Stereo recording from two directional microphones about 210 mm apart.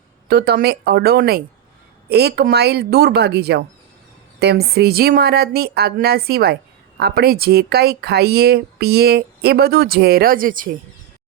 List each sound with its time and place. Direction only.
0.3 s speech: 50° right (ahead or behind)